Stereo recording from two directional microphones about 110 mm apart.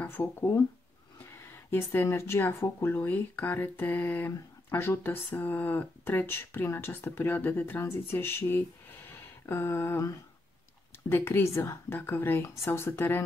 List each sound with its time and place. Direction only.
0.0 s speech: 20° left (ahead or behind)